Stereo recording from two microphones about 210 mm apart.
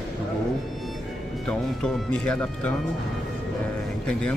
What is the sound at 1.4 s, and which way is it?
Speech, 5° left (ahead or behind).